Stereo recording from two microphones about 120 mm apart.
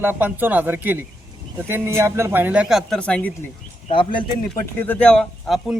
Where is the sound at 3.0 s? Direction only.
10° left (ahead or behind).